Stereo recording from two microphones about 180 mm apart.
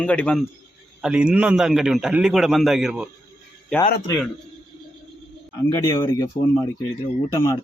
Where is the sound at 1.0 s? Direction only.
5° right (ahead or behind).